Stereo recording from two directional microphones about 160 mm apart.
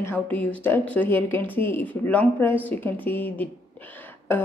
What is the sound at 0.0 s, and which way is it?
A woman's voice, 10° left (ahead or behind).